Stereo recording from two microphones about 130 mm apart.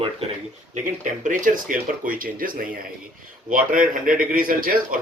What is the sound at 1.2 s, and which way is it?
A man's voice, 90° right.